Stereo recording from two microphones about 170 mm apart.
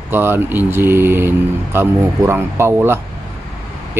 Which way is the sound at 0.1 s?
15° right (ahead or behind).